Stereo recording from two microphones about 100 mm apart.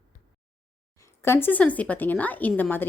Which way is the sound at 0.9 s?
25° left (ahead or behind).